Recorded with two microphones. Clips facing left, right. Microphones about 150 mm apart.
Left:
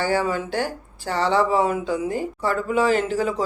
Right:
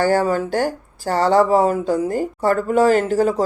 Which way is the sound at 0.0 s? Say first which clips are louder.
Right 5 dB; 45° right (ahead or behind).